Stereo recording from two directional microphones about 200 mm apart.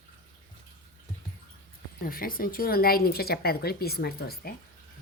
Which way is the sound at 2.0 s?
45° left (ahead or behind).